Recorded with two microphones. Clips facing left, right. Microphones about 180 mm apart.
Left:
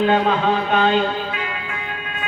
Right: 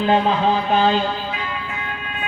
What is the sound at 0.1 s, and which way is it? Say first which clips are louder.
Music: even; 30° right (ahead or behind).